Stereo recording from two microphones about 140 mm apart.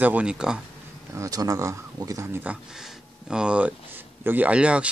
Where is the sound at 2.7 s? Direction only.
Centre (ahead or behind).